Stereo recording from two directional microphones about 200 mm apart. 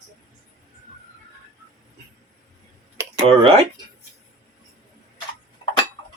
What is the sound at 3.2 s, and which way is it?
Speech, 25° right (ahead or behind).